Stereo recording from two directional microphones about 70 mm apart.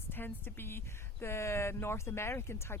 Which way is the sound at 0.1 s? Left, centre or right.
Left.